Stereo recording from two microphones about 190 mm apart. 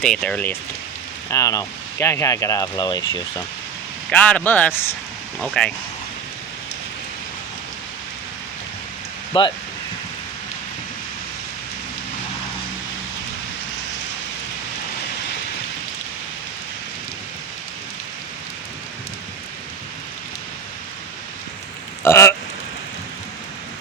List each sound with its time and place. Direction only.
0.0 s speech: 5° left (ahead or behind)
1.3 s speech: 15° left (ahead or behind)
4.1 s speech: 5° left (ahead or behind)
9.3 s speech: 25° left (ahead or behind)
22.0 s speech: 15° left (ahead or behind)